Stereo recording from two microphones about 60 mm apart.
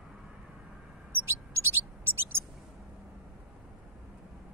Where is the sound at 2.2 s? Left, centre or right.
Right.